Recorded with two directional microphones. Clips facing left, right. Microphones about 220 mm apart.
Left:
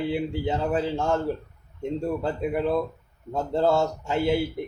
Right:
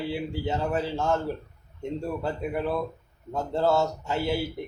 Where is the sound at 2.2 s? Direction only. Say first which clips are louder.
Left 3 dB; 20° left (ahead or behind).